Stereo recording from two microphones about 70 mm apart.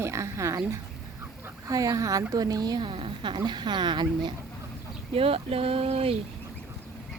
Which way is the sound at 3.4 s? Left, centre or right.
Right.